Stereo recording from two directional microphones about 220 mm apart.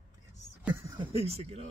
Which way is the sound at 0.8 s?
25° right (ahead or behind).